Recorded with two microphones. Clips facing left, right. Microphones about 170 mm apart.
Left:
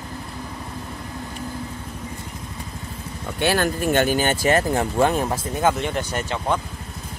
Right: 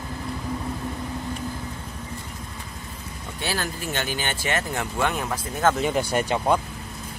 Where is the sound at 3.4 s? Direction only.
60° left (ahead or behind); by 5.4 s 35° left (ahead or behind).